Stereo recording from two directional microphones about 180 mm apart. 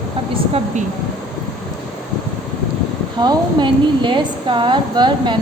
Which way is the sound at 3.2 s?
25° right (ahead or behind).